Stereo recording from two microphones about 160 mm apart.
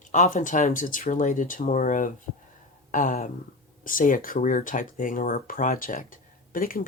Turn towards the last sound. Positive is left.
turn(degrees=60)  # may be behind; listen again after turning